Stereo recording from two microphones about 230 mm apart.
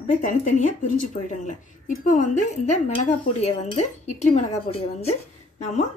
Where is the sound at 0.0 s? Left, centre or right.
Left.